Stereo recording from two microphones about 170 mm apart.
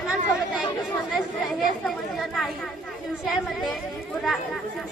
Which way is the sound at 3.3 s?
Centre (ahead or behind).